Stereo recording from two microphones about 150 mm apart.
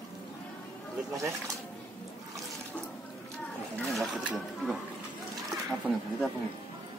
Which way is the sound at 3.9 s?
Centre (ahead or behind).